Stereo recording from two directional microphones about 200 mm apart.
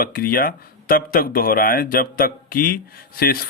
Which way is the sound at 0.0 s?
45° left (ahead or behind).